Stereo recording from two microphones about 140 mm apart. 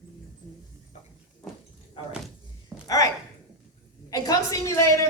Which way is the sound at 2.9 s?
25° left (ahead or behind).